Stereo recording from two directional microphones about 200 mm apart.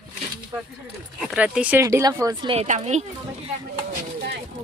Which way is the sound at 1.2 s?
5° right (ahead or behind).